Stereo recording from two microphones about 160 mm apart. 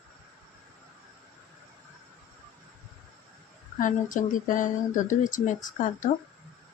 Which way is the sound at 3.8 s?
55° left (ahead or behind).